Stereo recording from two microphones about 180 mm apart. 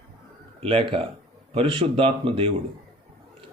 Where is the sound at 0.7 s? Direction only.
30° right (ahead or behind).